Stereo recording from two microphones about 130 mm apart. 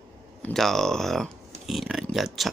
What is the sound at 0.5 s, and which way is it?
Speech, centre (ahead or behind).